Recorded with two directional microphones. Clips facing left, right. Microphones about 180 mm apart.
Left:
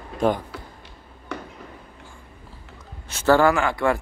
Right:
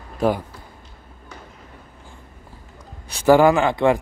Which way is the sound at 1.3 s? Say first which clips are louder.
Left 9 dB; 70° left (ahead or behind).